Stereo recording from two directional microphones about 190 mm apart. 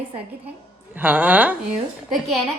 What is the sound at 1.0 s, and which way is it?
Speech, 10° right (ahead or behind).